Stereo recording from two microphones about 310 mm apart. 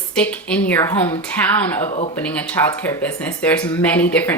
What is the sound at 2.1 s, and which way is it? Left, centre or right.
Speech, centre.